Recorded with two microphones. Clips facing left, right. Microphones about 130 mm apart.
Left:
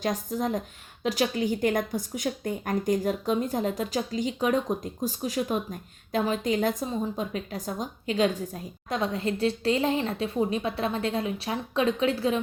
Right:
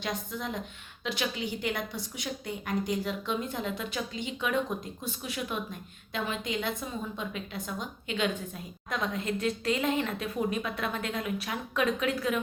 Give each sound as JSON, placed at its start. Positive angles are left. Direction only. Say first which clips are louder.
{"t": 0.0, "sound": "a woman's voice", "louder": "left 7 dB", "side_deg": 40}